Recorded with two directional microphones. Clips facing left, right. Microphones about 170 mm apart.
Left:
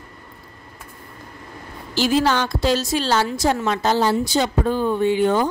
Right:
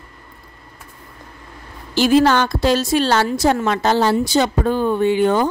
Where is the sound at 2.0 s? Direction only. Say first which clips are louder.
Right 5 dB; 60° right (ahead or behind).